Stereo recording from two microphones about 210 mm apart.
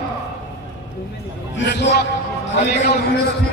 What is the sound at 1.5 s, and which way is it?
Speech, 55° left (ahead or behind).